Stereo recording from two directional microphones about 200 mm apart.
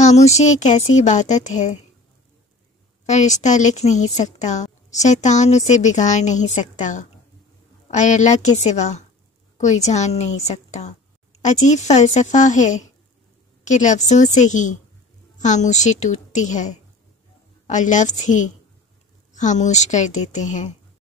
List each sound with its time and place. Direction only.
0.0 s speech: 35° left (ahead or behind)
3.1 s speech: 35° left (ahead or behind)